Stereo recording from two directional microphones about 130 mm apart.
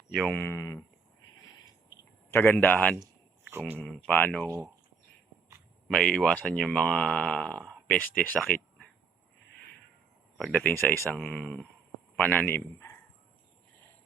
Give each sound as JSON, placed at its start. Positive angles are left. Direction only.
{"t": 0.1, "sound": "speech", "side_deg": 0}
{"t": 0.3, "sound": "speech", "side_deg": 20}
{"t": 2.3, "sound": "speech", "side_deg": 15}
{"t": 3.5, "sound": "speech", "side_deg": -15}
{"t": 3.8, "sound": "speech", "side_deg": 5}
{"t": 5.9, "sound": "speech", "side_deg": 5}
{"t": 8.4, "sound": "a sound", "side_deg": 5}
{"t": 10.3, "sound": "a man's voice", "side_deg": 5}